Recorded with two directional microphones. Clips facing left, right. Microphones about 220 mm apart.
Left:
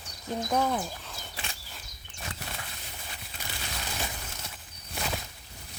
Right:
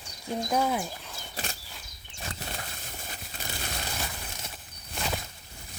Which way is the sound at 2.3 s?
35° right (ahead or behind).